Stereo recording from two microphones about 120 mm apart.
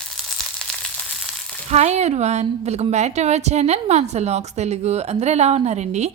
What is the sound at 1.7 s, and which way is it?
A woman's voice, 70° right (ahead or behind).